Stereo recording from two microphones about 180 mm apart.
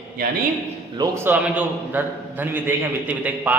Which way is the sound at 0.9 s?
20° right (ahead or behind).